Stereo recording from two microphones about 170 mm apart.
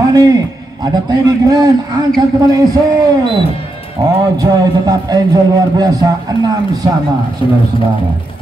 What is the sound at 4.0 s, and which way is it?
A man's voice, 25° right (ahead or behind).